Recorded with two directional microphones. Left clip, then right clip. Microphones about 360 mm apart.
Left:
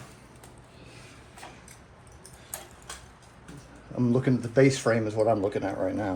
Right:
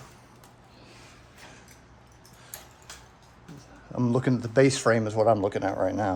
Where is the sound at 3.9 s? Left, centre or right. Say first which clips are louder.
Even; right.